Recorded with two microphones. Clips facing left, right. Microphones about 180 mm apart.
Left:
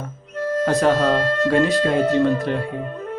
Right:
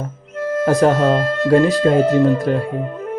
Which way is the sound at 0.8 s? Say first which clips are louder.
Right 3 dB; 35° right (ahead or behind).